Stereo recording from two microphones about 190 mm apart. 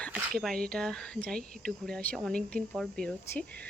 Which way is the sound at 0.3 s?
5° left (ahead or behind).